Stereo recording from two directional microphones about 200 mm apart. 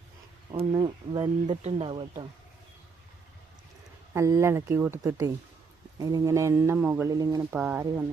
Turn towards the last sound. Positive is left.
turn(degrees=-10)  # may be behind; listen again after turning